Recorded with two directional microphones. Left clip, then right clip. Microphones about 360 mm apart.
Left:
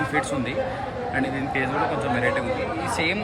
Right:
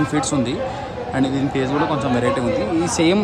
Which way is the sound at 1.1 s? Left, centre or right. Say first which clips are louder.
Right 5 dB; centre.